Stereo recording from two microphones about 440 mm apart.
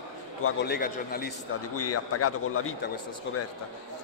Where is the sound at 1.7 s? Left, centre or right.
Left.